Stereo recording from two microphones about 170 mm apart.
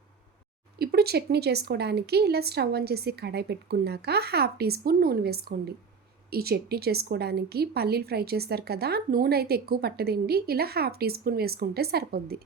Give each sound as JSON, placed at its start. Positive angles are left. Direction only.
{"t": 0.8, "sound": "a woman's voice", "side_deg": -65}